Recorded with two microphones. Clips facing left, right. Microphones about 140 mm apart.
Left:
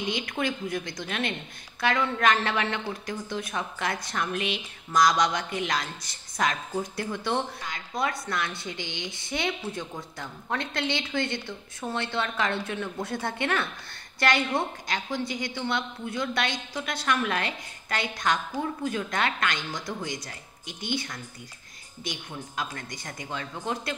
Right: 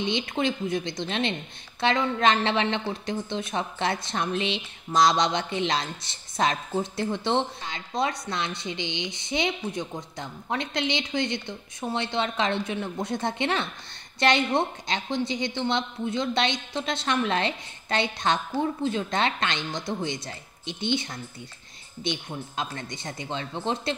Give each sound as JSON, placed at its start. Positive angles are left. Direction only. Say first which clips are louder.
{"t": 0.0, "sound": "speech", "louder": "right 3 dB", "side_deg": -25}